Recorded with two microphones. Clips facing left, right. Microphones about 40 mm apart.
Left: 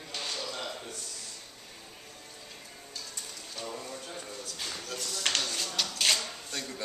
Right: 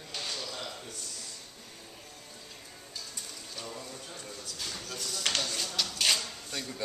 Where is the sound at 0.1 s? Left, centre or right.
Centre.